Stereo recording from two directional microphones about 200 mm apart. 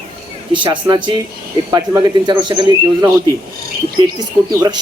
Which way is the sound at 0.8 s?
20° right (ahead or behind).